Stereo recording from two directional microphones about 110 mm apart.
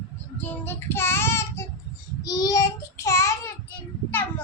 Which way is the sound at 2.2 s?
35° left (ahead or behind).